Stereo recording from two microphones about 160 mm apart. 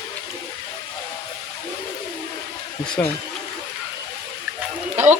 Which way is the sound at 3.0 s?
10° left (ahead or behind).